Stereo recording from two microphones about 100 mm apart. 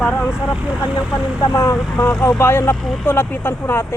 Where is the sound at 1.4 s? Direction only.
35° left (ahead or behind).